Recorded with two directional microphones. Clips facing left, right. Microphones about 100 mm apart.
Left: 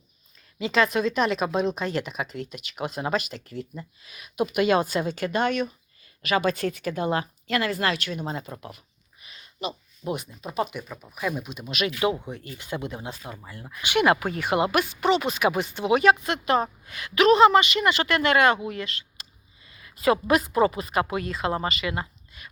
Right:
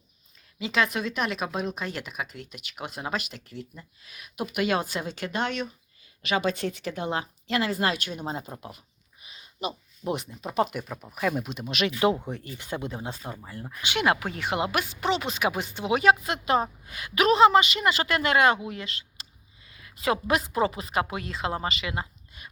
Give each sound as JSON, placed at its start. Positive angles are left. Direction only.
{"t": 0.6, "sound": "speech", "side_deg": -5}
{"t": 7.9, "sound": "speech", "side_deg": -15}
{"t": 9.2, "sound": "a sound", "side_deg": -15}
{"t": 10.1, "sound": "speech", "side_deg": -30}
{"t": 10.8, "sound": "speech", "side_deg": -15}
{"t": 11.3, "sound": "speech", "side_deg": -40}
{"t": 11.7, "sound": "speech", "side_deg": -30}
{"t": 14.0, "sound": "speech", "side_deg": 0}